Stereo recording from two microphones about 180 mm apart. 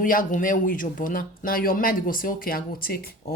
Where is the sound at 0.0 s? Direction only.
50° left (ahead or behind).